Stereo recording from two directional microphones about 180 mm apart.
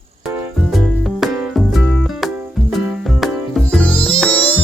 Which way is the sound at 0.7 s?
Centre (ahead or behind).